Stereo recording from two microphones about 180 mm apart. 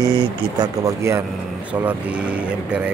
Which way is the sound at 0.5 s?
15° right (ahead or behind).